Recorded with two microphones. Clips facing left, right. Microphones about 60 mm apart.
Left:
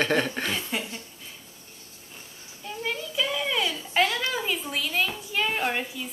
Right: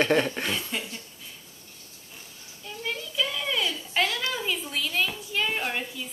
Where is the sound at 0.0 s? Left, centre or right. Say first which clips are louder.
Right 2 dB; centre.